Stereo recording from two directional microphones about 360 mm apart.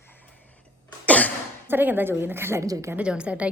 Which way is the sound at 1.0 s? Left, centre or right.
Centre.